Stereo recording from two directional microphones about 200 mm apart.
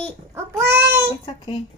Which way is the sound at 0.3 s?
10° right (ahead or behind).